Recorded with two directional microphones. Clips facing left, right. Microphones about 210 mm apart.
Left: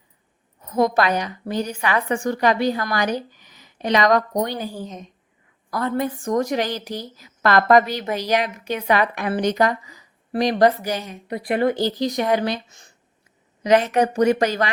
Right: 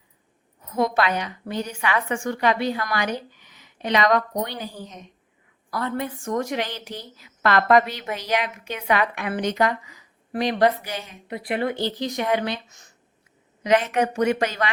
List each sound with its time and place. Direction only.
0.6 s a woman's voice: 40° left (ahead or behind)